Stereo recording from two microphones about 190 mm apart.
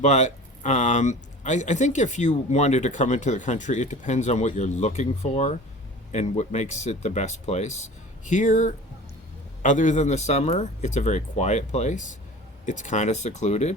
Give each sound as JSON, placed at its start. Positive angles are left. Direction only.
{"t": 0.0, "sound": "speech", "side_deg": 40}